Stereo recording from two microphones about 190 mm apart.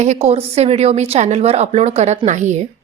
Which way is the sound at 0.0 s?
35° right (ahead or behind).